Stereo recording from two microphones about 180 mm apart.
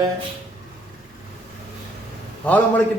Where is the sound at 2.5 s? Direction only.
10° left (ahead or behind).